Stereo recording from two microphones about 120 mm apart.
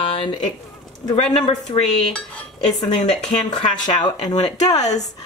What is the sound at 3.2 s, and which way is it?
Speech, 70° left (ahead or behind).